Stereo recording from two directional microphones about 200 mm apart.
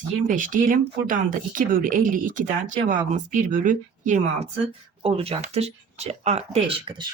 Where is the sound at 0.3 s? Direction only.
40° right (ahead or behind).